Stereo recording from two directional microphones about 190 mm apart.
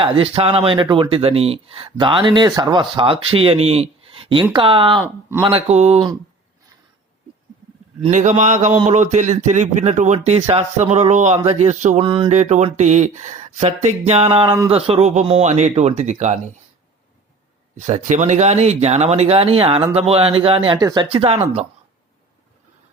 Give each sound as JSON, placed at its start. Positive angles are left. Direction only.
{"t": 0.0, "sound": "speech", "side_deg": -30}
{"t": 8.0, "sound": "speech", "side_deg": -40}
{"t": 12.0, "sound": "speech", "side_deg": -25}
{"t": 12.3, "sound": "speech", "side_deg": -35}
{"t": 17.7, "sound": "speech", "side_deg": -35}